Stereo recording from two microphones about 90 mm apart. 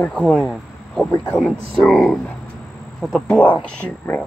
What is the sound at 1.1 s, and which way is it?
Speech, 20° left (ahead or behind).